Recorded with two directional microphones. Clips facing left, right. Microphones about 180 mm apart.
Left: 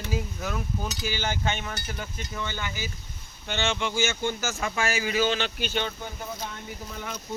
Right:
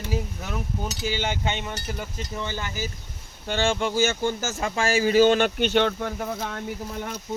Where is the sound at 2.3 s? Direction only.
35° right (ahead or behind); by 6.6 s 65° right (ahead or behind).